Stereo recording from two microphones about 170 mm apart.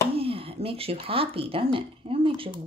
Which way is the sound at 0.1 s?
35° right (ahead or behind).